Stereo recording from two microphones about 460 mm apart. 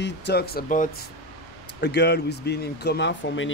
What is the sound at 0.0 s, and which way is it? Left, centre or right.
Speech, left.